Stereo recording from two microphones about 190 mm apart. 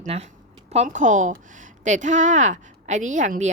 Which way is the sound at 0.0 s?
35° right (ahead or behind).